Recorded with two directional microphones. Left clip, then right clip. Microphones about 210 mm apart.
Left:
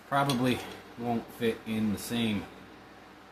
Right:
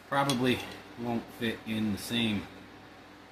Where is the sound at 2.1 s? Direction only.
15° left (ahead or behind).